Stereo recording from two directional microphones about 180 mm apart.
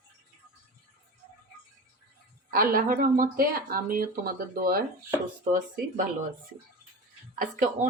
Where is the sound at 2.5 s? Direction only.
55° right (ahead or behind).